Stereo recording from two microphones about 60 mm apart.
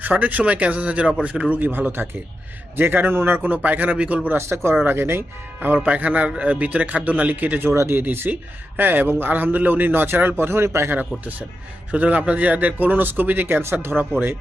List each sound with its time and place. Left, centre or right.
0.0 s a man's voice: right
3.4 s speech: right
4.3 s a man's voice: right
5.8 s speech: right
7.7 s speech: right
8.0 s a man's voice: right
10.9 s speech: right
13.9 s a man's voice: right